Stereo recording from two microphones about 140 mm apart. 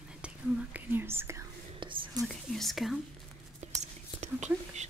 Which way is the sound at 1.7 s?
35° right (ahead or behind).